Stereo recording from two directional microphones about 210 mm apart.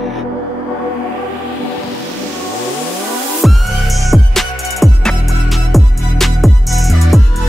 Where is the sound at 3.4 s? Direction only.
Centre (ahead or behind).